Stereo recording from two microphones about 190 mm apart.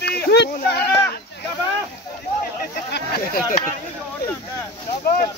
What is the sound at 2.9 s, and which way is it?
Speech, 50° left (ahead or behind).